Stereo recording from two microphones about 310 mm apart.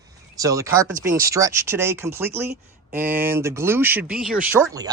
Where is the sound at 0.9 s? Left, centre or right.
Right.